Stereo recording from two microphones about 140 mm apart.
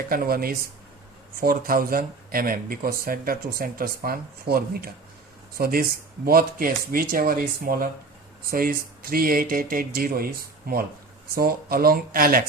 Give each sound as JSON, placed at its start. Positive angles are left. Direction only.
{"t": 0.1, "sound": "speech", "side_deg": -90}